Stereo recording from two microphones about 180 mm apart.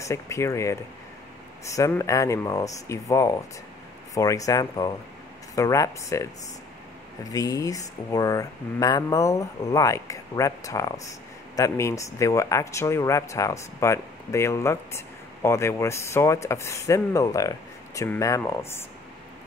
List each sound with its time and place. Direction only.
0.1 s speech: 15° left (ahead or behind)
1.8 s speech: 15° left (ahead or behind)
7.2 s speech: 20° left (ahead or behind)